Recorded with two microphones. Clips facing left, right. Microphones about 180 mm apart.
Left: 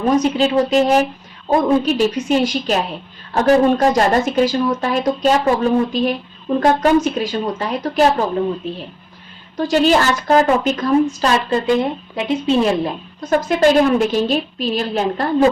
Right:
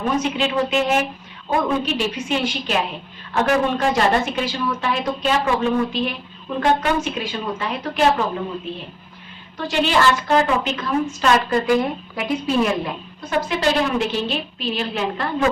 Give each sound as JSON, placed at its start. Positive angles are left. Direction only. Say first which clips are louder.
{"t": 0.2, "sound": "a woman's voice", "louder": "left 6 dB", "side_deg": 35}
{"t": 9.6, "sound": "a woman's voice", "louder": "left 5 dB", "side_deg": 40}
{"t": 13.3, "sound": "a woman's voice", "louder": "left 7 dB", "side_deg": 45}